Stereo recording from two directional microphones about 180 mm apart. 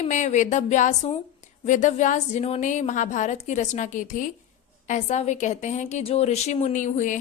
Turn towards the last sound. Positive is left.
turn(degrees=45)  # may be behind; listen again after turning